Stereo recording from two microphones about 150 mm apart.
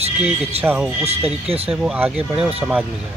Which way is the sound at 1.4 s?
40° right (ahead or behind).